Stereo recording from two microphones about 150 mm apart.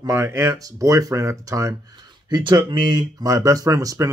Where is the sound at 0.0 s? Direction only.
15° right (ahead or behind).